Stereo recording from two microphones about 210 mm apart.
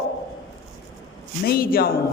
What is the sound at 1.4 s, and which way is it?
Speech, 45° left (ahead or behind).